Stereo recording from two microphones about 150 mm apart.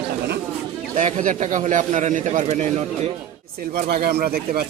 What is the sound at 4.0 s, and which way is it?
Speech, 90° right.